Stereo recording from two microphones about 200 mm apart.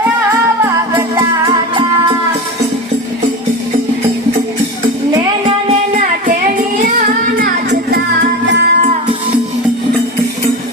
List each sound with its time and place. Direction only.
7.3 s music: 50° right (ahead or behind)